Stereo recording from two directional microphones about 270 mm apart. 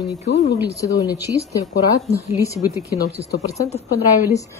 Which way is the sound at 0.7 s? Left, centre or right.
Centre.